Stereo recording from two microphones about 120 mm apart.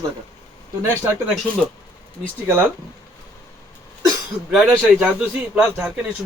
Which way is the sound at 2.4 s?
20° right (ahead or behind).